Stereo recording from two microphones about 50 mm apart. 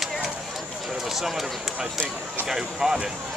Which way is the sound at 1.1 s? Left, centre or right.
Centre.